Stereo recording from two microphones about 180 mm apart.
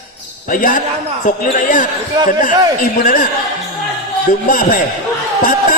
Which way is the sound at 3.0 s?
50° left (ahead or behind).